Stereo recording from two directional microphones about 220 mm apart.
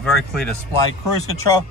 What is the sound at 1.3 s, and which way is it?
Speech, 15° left (ahead or behind).